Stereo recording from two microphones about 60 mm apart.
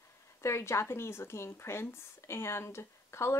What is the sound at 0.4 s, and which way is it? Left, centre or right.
Speech, left.